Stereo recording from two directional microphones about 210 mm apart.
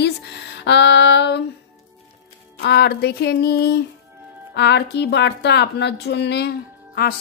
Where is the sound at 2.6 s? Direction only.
50° left (ahead or behind).